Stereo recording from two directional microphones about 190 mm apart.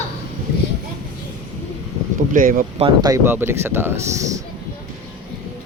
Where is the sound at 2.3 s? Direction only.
45° right (ahead or behind).